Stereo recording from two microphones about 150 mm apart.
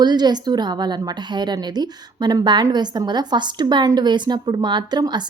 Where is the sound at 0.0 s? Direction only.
30° right (ahead or behind).